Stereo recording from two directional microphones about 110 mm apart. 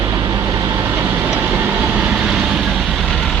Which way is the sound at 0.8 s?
20° right (ahead or behind).